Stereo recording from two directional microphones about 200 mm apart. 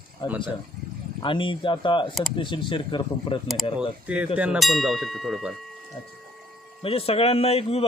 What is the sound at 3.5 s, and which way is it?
Speech, centre (ahead or behind).